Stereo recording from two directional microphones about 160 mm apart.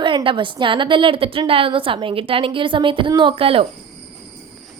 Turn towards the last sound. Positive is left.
turn(degrees=-35)  # may be behind; listen again after turning